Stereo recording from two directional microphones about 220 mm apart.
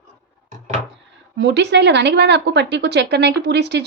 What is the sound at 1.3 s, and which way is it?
A woman's voice, 55° right (ahead or behind).